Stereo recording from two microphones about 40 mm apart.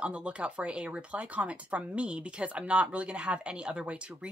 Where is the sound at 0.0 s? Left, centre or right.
Right.